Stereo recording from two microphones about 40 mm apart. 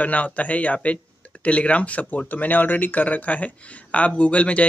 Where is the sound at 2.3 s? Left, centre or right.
Left.